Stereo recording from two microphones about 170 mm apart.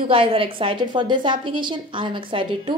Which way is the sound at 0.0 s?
30° right (ahead or behind).